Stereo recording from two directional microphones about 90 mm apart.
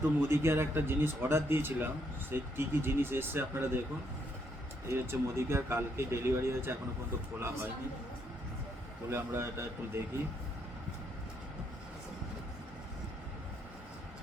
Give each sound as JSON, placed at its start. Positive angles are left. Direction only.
{"t": 0.2, "sound": "speech", "side_deg": -25}
{"t": 4.9, "sound": "speech", "side_deg": -30}
{"t": 9.0, "sound": "speech", "side_deg": -30}